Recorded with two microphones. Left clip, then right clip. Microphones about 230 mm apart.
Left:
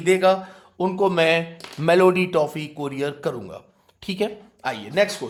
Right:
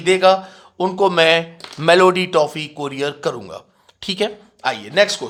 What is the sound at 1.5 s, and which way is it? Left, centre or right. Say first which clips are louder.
A man's voice: right 5 dB; right.